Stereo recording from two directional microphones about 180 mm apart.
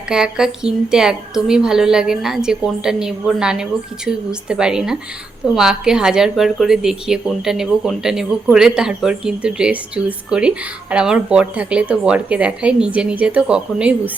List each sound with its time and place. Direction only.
0.1 s speech: 5° right (ahead or behind)